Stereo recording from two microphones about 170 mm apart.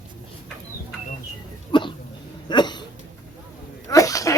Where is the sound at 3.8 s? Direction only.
20° left (ahead or behind).